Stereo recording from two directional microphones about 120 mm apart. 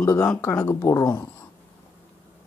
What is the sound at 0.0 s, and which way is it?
Speech, 20° left (ahead or behind).